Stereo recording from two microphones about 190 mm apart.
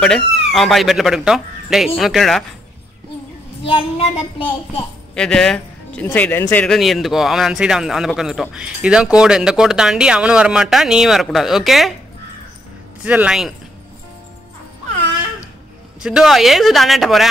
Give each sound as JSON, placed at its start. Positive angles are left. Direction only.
{"t": 0.0, "sound": "a man's voice", "side_deg": 5}
{"t": 3.6, "sound": "a woman's voice", "side_deg": 30}
{"t": 5.1, "sound": "a man's voice", "side_deg": 5}
{"t": 13.0, "sound": "speech", "side_deg": -5}
{"t": 16.0, "sound": "a man's voice", "side_deg": -5}